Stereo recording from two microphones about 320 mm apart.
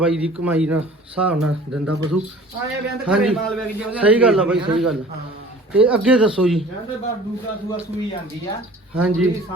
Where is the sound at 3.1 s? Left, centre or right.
Centre.